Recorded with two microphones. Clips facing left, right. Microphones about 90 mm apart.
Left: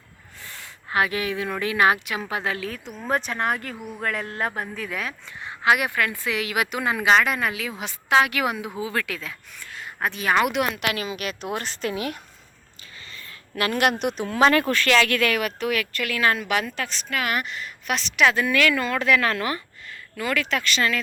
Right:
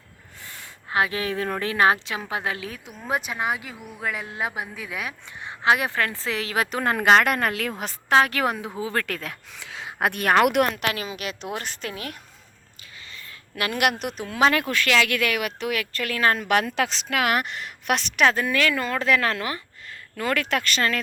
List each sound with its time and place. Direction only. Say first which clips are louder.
0.4 s speech: left 1 dB; 20° right (ahead or behind)
3.1 s speech: left 2 dB; 5° right (ahead or behind); by 7.7 s 55° right (ahead or behind)
7.8 s speech: even; 40° right (ahead or behind)
9.6 s a woman's voice: right 3 dB; 90° right; by 10.9 s 45° right (ahead or behind)
11.2 s speech: left 2 dB; 20° right (ahead or behind)
11.9 s a woman's voice: left 10 dB; 10° left (ahead or behind)
14.0 s speech: left 2 dB; 5° right (ahead or behind); by 16.7 s 50° right (ahead or behind)
16.7 s a woman's voice: right 4 dB; 90° right; by 18.3 s 55° right (ahead or behind)
18.3 s speech: left 2 dB; 30° right (ahead or behind)
20.1 s speech: right 1 dB; 45° right (ahead or behind)